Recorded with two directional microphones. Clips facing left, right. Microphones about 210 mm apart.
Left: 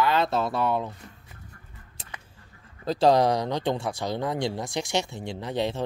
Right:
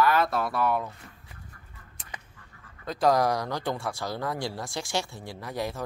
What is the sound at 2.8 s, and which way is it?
Speech, 25° left (ahead or behind).